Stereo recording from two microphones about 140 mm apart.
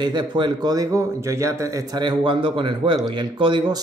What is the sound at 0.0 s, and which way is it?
A man's voice, 35° right (ahead or behind).